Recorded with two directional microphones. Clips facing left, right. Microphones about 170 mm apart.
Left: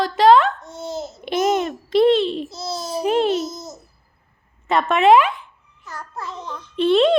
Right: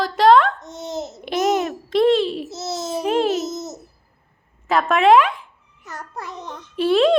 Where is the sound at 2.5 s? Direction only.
20° right (ahead or behind).